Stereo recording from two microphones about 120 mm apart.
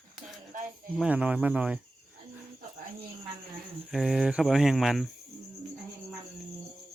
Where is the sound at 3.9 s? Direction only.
Centre (ahead or behind).